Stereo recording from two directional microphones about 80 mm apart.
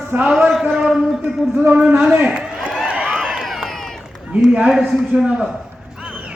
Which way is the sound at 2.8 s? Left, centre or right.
Centre.